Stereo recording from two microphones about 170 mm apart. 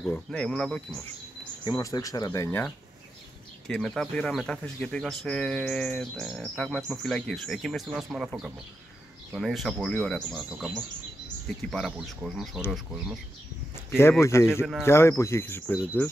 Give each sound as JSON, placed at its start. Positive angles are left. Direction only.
{"t": 0.0, "sound": "speech", "side_deg": 5}
{"t": 1.6, "sound": "speech", "side_deg": 25}
{"t": 3.6, "sound": "speech", "side_deg": 5}
{"t": 9.3, "sound": "speech", "side_deg": 0}
{"t": 13.8, "sound": "speech", "side_deg": 15}